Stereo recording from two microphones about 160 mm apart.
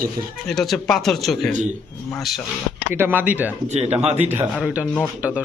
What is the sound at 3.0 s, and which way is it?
Speech, 10° right (ahead or behind).